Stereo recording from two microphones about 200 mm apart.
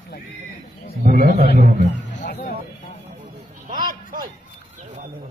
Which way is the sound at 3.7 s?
45° right (ahead or behind).